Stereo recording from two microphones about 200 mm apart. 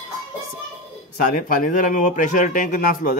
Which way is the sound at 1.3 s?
40° left (ahead or behind).